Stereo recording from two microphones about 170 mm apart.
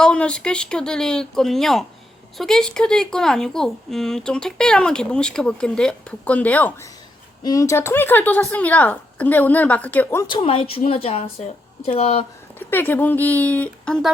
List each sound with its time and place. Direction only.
0.0 s speech: 5° left (ahead or behind)
7.4 s a woman's voice: 20° left (ahead or behind)
10.2 s speech: 30° left (ahead or behind)
12.5 s a woman's voice: 10° left (ahead or behind)